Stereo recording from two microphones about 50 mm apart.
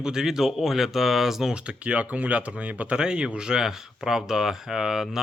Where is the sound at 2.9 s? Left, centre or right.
Centre.